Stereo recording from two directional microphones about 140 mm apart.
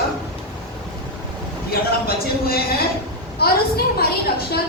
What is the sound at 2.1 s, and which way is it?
A woman's voice, 90° left.